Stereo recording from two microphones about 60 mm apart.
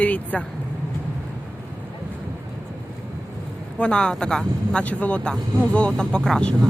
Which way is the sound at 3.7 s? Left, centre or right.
Centre.